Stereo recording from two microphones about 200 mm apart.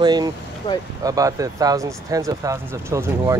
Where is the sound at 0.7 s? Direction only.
25° left (ahead or behind).